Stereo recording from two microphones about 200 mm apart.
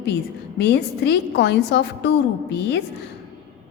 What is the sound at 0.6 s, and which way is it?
A woman's voice, 55° left (ahead or behind).